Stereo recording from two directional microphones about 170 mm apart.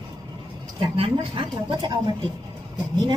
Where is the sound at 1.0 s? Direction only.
30° right (ahead or behind).